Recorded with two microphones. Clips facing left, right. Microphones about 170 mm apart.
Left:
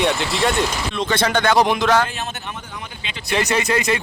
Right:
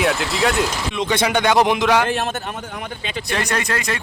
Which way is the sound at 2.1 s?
50° right (ahead or behind).